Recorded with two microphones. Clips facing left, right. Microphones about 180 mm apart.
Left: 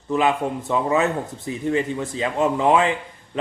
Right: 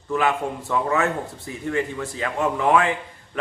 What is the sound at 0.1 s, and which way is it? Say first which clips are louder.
A man's voice: left 2 dB; 20° left (ahead or behind).